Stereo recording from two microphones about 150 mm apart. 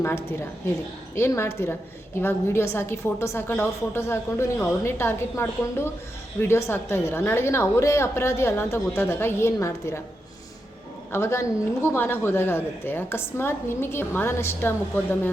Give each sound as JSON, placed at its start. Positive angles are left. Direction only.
{"t": 0.0, "sound": "a woman's voice", "side_deg": 15}
{"t": 11.1, "sound": "a woman's voice", "side_deg": 15}